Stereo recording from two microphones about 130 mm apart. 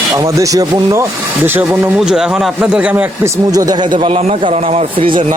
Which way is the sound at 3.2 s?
30° right (ahead or behind).